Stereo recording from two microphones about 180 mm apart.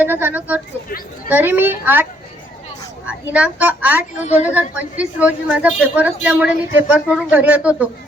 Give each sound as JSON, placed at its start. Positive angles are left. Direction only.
{"t": 0.0, "sound": "speech", "side_deg": -10}
{"t": 0.9, "sound": "speech", "side_deg": 50}
{"t": 1.3, "sound": "a woman's voice", "side_deg": -10}
{"t": 3.1, "sound": "a woman's voice", "side_deg": -5}